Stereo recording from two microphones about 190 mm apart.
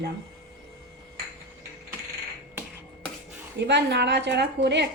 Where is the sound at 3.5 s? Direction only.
65° right (ahead or behind).